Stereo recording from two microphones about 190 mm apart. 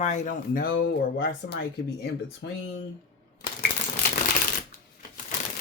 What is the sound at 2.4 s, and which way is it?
Speech, 70° left (ahead or behind).